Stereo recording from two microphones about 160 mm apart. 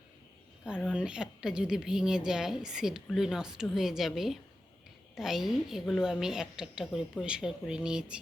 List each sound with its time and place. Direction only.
0.8 s a woman's voice: 5° right (ahead or behind)